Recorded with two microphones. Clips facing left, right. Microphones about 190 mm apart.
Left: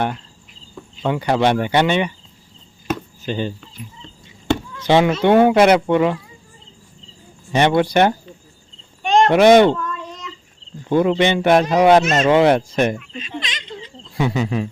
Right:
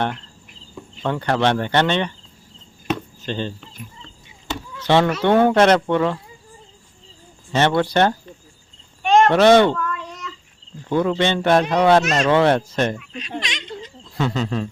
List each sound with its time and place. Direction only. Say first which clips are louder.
1.0 s speech: left 2 dB; 10° left (ahead or behind)
2.8 s chop: left 1 dB; 5° left (ahead or behind)
4.8 s speech: left 1 dB; 15° left (ahead or behind)
7.5 s speech: left 2 dB; 15° left (ahead or behind)
9.3 s a sound: left 5 dB; 15° left (ahead or behind)
10.8 s speech: left 3 dB; 15° left (ahead or behind)
12.3 s speech: left 3 dB; 15° left (ahead or behind)
13.4 s a sound: right 1 dB; centre (ahead or behind)
14.2 s speech: left 2 dB; 10° left (ahead or behind)